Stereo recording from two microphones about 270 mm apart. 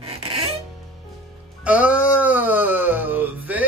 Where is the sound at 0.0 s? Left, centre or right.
Right.